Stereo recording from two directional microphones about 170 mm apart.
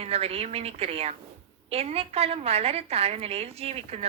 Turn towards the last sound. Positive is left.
turn(degrees=-35)  # may be behind; listen again after turning